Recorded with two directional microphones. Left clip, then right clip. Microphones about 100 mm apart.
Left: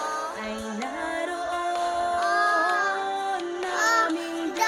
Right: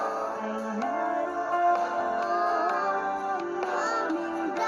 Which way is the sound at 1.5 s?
45° right (ahead or behind).